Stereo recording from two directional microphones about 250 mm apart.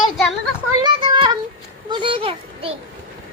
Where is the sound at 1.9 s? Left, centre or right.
Centre.